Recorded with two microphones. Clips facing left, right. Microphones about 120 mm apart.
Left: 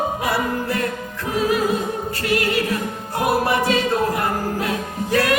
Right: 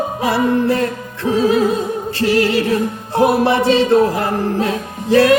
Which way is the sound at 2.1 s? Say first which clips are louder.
Right 7 dB; 30° right (ahead or behind).